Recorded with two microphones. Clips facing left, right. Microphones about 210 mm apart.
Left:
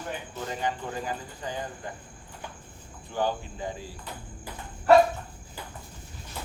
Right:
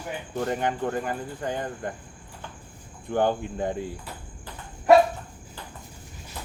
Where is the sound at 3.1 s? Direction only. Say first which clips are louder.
Right 5 dB; 55° right (ahead or behind).